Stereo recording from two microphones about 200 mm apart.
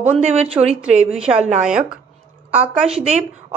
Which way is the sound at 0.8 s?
5° right (ahead or behind).